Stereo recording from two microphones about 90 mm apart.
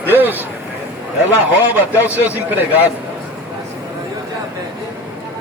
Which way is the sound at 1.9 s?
20° right (ahead or behind).